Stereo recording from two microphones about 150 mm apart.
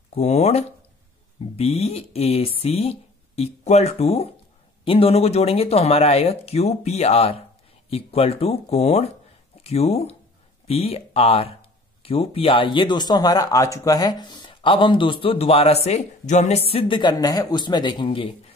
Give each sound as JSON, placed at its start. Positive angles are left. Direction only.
{"t": 0.1, "sound": "speech", "side_deg": 45}